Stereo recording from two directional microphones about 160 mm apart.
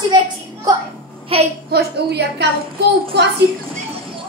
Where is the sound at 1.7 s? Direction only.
90° right.